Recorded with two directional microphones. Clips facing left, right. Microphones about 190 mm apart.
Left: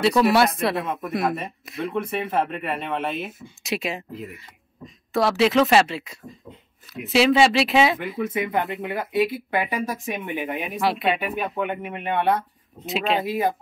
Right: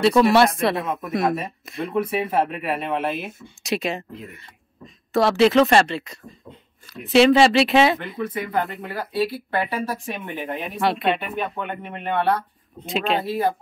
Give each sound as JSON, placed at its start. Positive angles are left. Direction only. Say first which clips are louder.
{"t": 0.0, "sound": "speech", "louder": "right 2 dB", "side_deg": 0}
{"t": 8.3, "sound": "speech", "louder": "even", "side_deg": 20}
{"t": 12.8, "sound": "speech", "louder": "even", "side_deg": 0}